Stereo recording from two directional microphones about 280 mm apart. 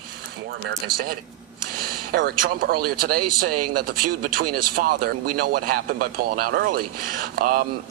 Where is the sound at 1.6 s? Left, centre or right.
Right.